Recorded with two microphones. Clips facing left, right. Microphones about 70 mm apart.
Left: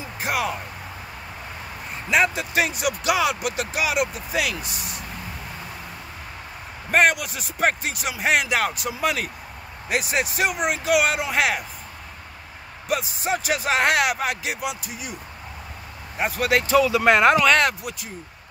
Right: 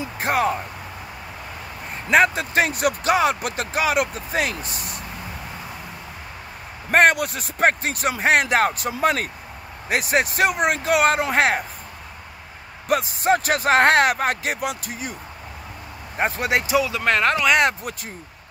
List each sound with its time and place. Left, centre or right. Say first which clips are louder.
0.2 s speech: right 4 dB; right
2.0 s speech: right 4 dB; right
6.9 s speech: right 3 dB; right
12.8 s speech: right 5 dB; right
16.2 s speech: even; right
16.7 s speech: left 5 dB; centre
17.0 s a man's voice: left 4 dB; centre